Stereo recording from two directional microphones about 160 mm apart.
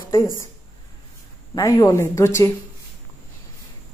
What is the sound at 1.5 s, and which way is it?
Speech, 20° left (ahead or behind).